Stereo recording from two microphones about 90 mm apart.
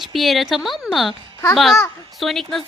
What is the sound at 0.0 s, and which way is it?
A woman's voice, centre (ahead or behind).